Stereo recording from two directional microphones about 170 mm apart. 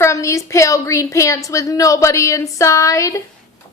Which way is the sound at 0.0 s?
15° left (ahead or behind).